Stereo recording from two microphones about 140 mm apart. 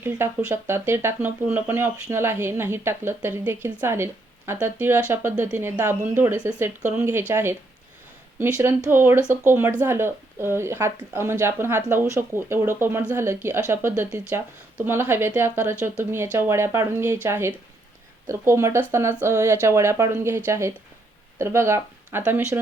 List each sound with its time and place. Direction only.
0.0 s speech: 15° right (ahead or behind)